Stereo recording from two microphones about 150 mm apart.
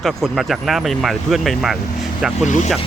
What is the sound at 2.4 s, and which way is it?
Speech, 55° left (ahead or behind).